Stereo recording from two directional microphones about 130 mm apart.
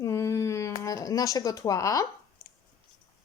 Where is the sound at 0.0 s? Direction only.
20° left (ahead or behind).